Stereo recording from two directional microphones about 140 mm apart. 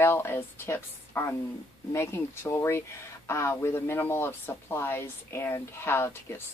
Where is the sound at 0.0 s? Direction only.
15° left (ahead or behind).